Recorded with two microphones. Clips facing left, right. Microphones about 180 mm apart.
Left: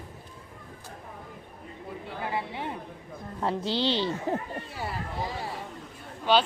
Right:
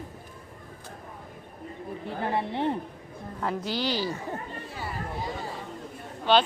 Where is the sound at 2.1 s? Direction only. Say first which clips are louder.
Right 4 dB; 45° right (ahead or behind).